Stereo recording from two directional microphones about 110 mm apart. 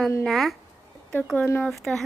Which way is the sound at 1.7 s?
5° left (ahead or behind).